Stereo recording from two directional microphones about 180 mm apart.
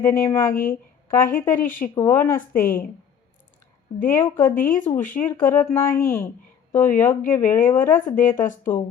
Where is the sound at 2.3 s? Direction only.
50° left (ahead or behind).